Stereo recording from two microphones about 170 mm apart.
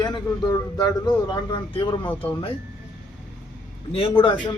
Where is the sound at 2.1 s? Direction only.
10° left (ahead or behind).